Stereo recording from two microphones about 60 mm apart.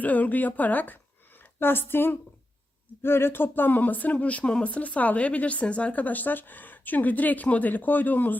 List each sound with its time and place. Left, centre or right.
0.0 s speech: left